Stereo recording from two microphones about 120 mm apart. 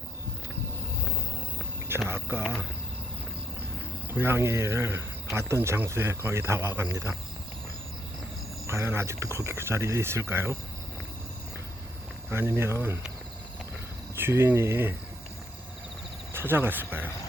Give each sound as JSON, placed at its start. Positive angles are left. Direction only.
{"t": 2.0, "sound": "speech", "side_deg": -20}
{"t": 4.1, "sound": "speech", "side_deg": -20}
{"t": 8.6, "sound": "speech", "side_deg": -20}
{"t": 12.3, "sound": "speech", "side_deg": -20}
{"t": 14.2, "sound": "speech", "side_deg": -20}
{"t": 16.3, "sound": "speech", "side_deg": -20}